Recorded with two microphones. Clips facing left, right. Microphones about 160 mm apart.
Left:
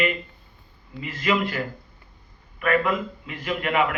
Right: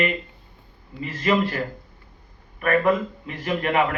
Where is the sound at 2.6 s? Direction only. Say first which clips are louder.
Right 3 dB; 40° right (ahead or behind).